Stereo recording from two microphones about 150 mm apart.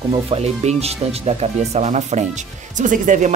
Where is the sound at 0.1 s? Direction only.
40° right (ahead or behind).